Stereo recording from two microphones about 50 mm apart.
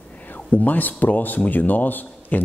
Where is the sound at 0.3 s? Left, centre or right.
Left.